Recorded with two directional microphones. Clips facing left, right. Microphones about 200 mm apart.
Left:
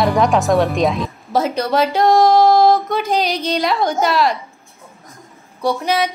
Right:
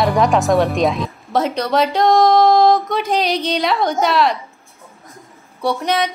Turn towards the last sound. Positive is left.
turn(degrees=0)  # may be behind; listen again after turning